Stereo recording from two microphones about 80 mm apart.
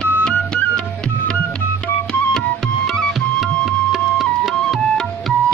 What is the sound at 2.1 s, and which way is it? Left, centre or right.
Music, centre.